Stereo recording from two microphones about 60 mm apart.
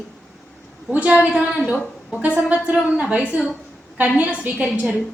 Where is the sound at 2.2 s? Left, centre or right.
Right.